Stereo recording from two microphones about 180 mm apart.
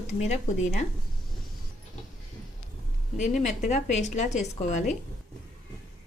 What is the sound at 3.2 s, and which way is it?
A woman's voice, 40° left (ahead or behind).